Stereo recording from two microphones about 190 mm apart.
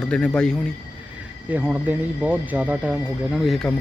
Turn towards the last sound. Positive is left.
turn(degrees=0)  # may be behind; listen again after turning